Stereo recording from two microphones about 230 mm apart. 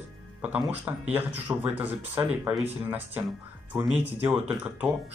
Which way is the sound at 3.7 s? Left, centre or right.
Centre.